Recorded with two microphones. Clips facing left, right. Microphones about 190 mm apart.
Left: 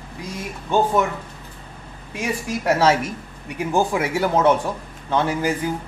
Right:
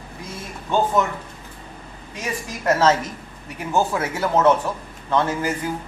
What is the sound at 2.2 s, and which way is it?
A man's voice, 10° left (ahead or behind).